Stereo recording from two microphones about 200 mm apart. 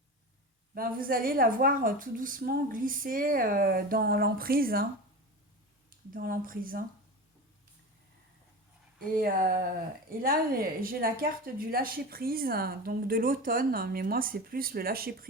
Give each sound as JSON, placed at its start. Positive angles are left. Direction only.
{"t": 0.7, "sound": "a woman's voice", "side_deg": -45}
{"t": 6.1, "sound": "a woman's voice", "side_deg": -45}
{"t": 9.1, "sound": "a woman's voice", "side_deg": -45}